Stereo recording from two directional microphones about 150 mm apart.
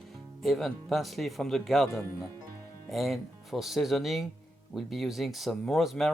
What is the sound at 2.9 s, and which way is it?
Speech, centre (ahead or behind).